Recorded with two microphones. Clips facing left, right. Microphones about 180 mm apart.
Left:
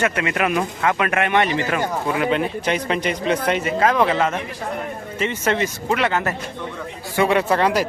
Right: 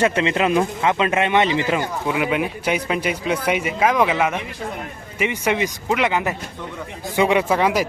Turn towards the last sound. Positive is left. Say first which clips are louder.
# even
turn(degrees=-10)  # may be behind; listen again after turning